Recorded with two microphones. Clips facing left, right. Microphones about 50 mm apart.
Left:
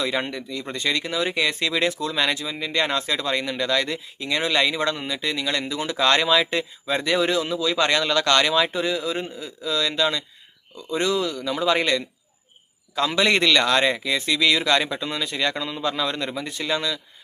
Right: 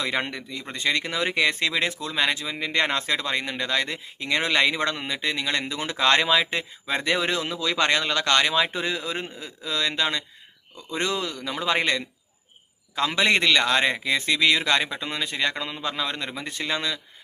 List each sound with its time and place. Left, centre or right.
0.0 s speech: right
0.7 s speech: right
1.0 s speech: right
1.7 s speech: right
2.4 s speech: right
3.2 s speech: right
4.2 s speech: right
7.0 s speech: right
7.9 s speech: right
8.7 s speech: right
13.1 s speech: right
13.3 s speech: centre
16.3 s speech: right